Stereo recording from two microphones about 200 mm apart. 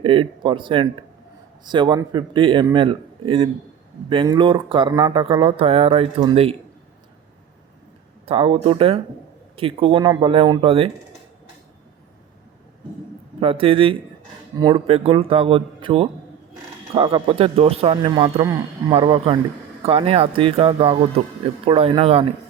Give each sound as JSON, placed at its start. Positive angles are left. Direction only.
{"t": 0.0, "sound": "speech", "side_deg": -25}
{"t": 8.2, "sound": "speech", "side_deg": -30}
{"t": 13.4, "sound": "speech", "side_deg": -25}